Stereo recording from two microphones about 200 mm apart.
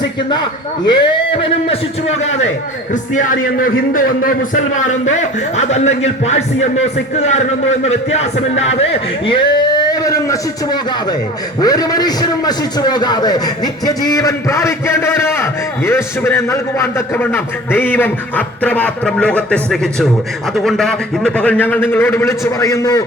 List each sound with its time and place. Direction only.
0.9 s a man's voice: 25° left (ahead or behind)